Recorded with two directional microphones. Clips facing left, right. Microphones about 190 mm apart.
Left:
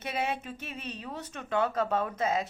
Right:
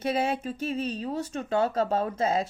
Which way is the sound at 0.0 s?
35° right (ahead or behind).